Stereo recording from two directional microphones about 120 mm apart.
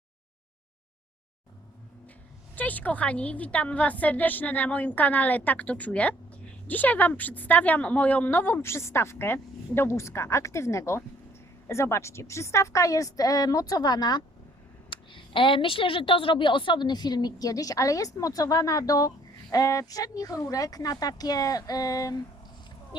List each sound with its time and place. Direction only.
2.6 s a woman's voice: 15° left (ahead or behind); by 22.2 s 30° left (ahead or behind)